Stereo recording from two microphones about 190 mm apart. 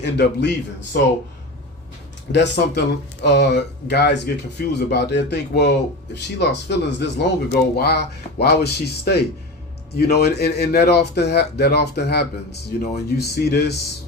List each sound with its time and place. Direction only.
0.0 s speech: 65° left (ahead or behind)
2.3 s speech: 65° left (ahead or behind)